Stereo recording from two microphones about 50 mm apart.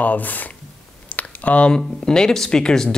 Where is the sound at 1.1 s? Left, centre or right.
Left.